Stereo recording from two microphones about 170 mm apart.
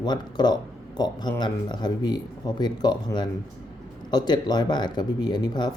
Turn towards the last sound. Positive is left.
turn(degrees=25)  # may be behind; listen again after turning